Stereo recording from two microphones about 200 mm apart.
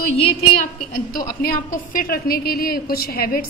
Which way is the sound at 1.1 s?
45° left (ahead or behind).